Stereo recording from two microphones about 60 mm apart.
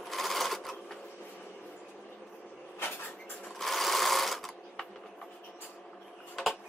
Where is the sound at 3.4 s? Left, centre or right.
Centre.